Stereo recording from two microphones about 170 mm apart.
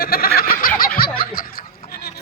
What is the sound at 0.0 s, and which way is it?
Snicker, 60° left (ahead or behind).